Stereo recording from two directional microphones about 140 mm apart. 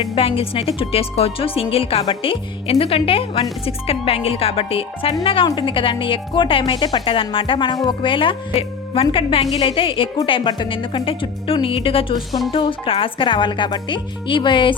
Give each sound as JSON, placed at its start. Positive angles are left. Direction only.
{"t": 0.2, "sound": "speech", "side_deg": 40}